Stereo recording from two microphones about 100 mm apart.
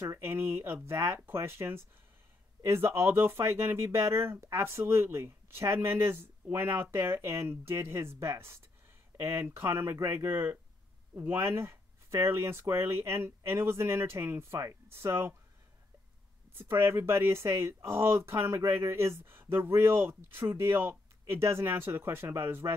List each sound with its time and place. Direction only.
0.0 s speech: 25° right (ahead or behind)
16.5 s speech: 25° right (ahead or behind)